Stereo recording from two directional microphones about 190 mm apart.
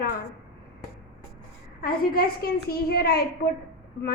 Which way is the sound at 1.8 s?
50° left (ahead or behind).